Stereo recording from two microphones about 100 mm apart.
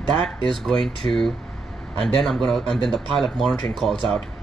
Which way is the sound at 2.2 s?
5° left (ahead or behind).